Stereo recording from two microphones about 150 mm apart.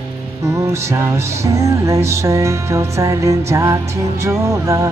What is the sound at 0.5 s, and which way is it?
Music, 20° right (ahead or behind).